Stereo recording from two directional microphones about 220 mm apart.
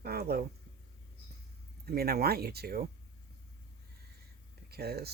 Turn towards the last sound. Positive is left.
turn(degrees=-45)  # may be behind; listen again after turning